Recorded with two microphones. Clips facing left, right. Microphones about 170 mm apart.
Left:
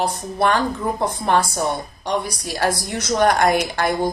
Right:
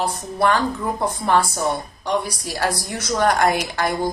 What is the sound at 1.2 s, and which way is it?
Speech, 20° left (ahead or behind).